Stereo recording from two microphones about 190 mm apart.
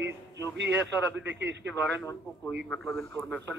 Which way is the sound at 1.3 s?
65° right (ahead or behind).